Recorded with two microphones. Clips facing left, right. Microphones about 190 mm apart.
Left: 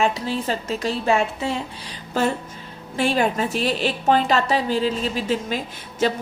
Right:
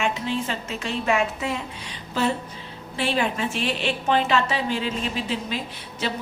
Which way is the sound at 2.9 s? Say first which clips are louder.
Left 4 dB; 45° left (ahead or behind).